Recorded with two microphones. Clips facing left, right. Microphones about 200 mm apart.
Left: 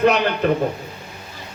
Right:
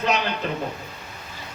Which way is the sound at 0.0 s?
55° left (ahead or behind).